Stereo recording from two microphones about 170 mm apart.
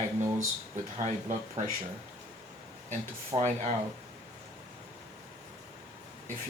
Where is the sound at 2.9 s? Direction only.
45° right (ahead or behind).